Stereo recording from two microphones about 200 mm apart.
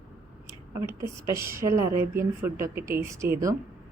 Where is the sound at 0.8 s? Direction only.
15° right (ahead or behind).